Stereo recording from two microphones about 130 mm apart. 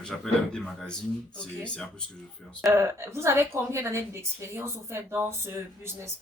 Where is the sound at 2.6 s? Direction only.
20° right (ahead or behind).